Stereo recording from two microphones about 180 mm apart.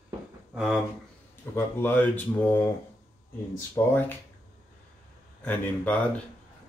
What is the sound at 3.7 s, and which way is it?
Speech, 10° left (ahead or behind).